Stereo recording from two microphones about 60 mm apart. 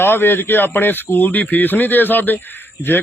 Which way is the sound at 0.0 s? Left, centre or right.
Left.